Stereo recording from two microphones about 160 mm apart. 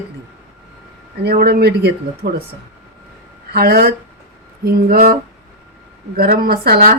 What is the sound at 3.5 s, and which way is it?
Speech, 80° right.